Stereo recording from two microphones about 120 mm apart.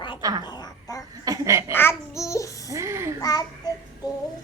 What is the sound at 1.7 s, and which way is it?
Child singing, 20° left (ahead or behind).